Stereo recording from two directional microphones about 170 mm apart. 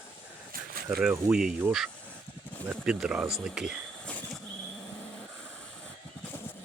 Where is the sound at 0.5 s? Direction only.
55° right (ahead or behind).